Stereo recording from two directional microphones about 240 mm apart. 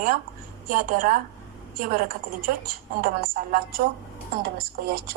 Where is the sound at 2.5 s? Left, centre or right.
Right.